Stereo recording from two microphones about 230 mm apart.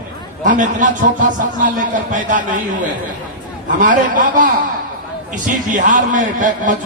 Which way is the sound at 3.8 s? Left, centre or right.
Right.